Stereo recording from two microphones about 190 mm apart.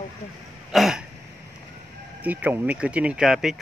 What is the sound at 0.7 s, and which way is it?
Throat clearing, centre (ahead or behind).